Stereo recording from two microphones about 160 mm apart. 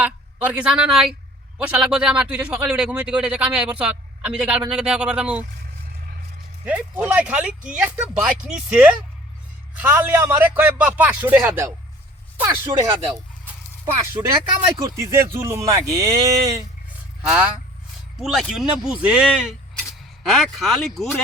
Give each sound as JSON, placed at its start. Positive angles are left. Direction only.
{"t": 0.0, "sound": "a woman's voice", "side_deg": -10}
{"t": 6.7, "sound": "a man's voice", "side_deg": -10}
{"t": 13.4, "sound": "a sound", "side_deg": -15}
{"t": 14.8, "sound": "a man's voice", "side_deg": -20}
{"t": 17.2, "sound": "a man's voice", "side_deg": -5}